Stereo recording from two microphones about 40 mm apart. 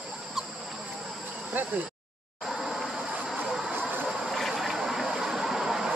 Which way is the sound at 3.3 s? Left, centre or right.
Centre.